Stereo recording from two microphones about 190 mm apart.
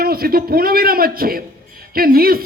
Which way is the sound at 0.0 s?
50° right (ahead or behind).